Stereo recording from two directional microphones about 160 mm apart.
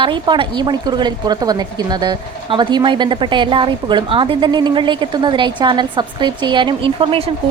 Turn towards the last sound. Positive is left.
turn(degrees=-35)  # may be behind; listen again after turning